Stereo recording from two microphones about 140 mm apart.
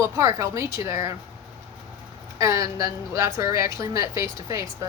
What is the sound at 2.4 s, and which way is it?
Speech, 20° right (ahead or behind).